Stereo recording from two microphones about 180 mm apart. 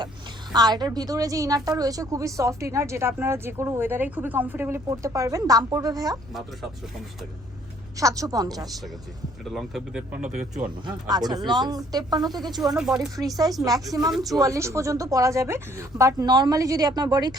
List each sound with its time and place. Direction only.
0.5 s a woman's voice: 25° right (ahead or behind)
7.9 s speech: 20° right (ahead or behind)
9.4 s speech: centre (ahead or behind)
11.1 s speech: 20° right (ahead or behind)
12.7 s speech: 5° right (ahead or behind)
13.1 s speech: 20° right (ahead or behind)